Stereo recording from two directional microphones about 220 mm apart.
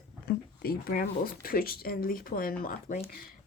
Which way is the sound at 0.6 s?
45° left (ahead or behind).